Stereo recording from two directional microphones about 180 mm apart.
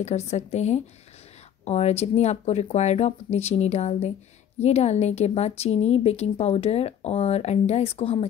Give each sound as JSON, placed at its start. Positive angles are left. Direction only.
{"t": 0.0, "sound": "a woman's voice", "side_deg": 40}